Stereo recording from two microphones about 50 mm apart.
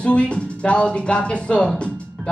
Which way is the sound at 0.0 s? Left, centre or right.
Left.